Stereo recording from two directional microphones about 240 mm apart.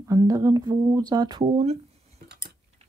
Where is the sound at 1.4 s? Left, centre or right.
Right.